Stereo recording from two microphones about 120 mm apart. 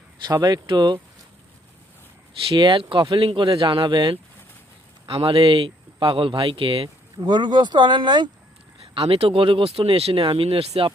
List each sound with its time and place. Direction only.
0.3 s speech: 35° right (ahead or behind)
2.5 s speech: 45° right (ahead or behind)
9.0 s speech: 55° right (ahead or behind)